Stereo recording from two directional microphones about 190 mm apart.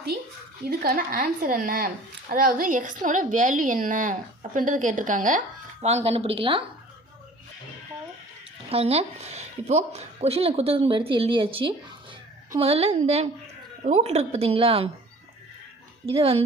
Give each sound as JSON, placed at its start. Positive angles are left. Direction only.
{"t": 0.6, "sound": "a woman's voice", "side_deg": -55}
{"t": 8.7, "sound": "a woman's voice", "side_deg": -30}
{"t": 16.0, "sound": "speech", "side_deg": -30}